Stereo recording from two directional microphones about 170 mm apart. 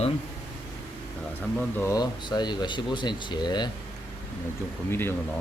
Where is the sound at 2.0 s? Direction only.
25° left (ahead or behind).